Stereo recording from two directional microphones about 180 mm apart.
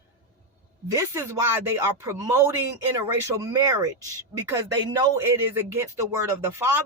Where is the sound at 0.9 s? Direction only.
15° right (ahead or behind).